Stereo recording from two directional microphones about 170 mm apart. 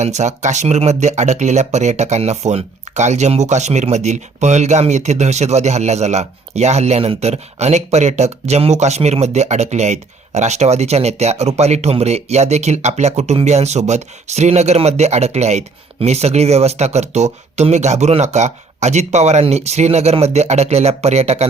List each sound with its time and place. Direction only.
0.0 s speech: 40° right (ahead or behind)